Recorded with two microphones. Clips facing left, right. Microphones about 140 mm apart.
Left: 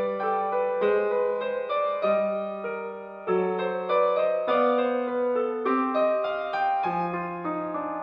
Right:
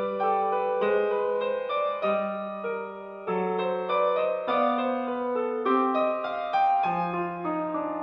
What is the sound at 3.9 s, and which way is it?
Music, 10° right (ahead or behind).